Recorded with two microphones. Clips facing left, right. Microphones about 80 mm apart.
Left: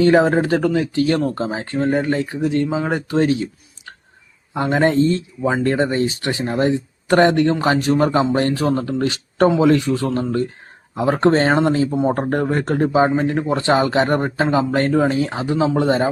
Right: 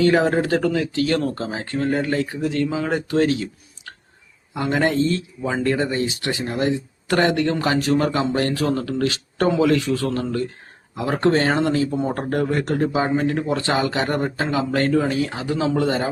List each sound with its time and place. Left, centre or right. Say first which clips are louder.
0.0 s speech: left 3 dB; left
4.5 s speech: left 4 dB; left